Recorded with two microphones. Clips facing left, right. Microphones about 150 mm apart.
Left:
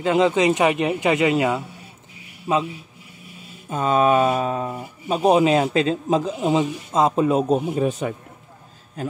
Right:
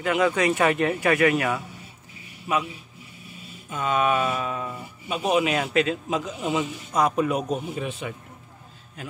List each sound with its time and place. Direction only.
0.0 s speech: 25° left (ahead or behind)
2.5 s speech: 35° left (ahead or behind)